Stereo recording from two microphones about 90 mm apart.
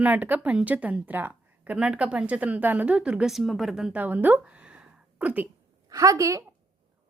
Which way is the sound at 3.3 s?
Centre (ahead or behind).